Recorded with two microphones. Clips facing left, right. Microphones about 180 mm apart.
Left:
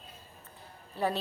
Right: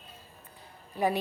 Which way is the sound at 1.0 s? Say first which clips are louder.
Right 3 dB; 15° right (ahead or behind).